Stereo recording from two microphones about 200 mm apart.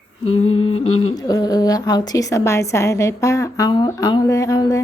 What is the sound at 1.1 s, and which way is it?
A woman's voice, 20° left (ahead or behind).